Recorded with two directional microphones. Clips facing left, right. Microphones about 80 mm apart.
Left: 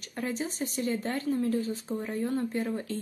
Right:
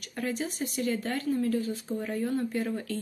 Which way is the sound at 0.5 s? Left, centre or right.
Left.